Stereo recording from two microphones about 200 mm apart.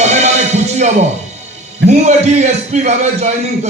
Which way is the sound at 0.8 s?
35° right (ahead or behind).